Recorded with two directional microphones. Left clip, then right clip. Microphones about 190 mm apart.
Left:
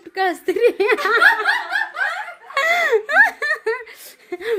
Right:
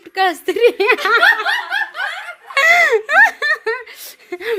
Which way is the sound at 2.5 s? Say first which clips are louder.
Right 5 dB; centre (ahead or behind).